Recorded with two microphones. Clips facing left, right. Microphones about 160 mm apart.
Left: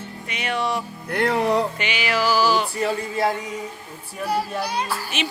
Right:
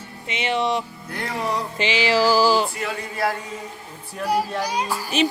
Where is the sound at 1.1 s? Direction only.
65° left (ahead or behind).